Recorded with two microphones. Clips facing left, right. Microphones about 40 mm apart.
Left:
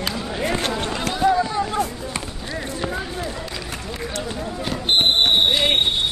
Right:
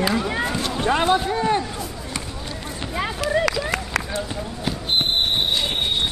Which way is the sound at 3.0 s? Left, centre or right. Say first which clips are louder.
Right 6 dB; right.